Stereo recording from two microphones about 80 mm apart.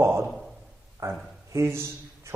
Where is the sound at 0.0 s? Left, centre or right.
Right.